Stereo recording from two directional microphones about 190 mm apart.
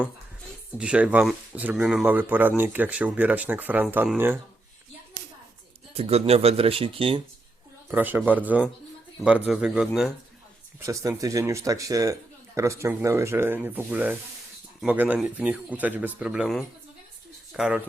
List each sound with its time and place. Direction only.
0.8 s speech: 5° right (ahead or behind)
6.0 s speech: 30° right (ahead or behind)
7.9 s speech: 10° right (ahead or behind)
10.8 s speech: 15° right (ahead or behind)